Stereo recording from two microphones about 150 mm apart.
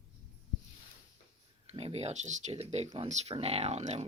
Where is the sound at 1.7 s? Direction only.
45° right (ahead or behind).